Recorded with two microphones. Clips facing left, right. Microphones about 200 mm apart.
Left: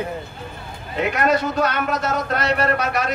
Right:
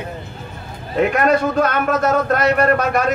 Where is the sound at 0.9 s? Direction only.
50° right (ahead or behind).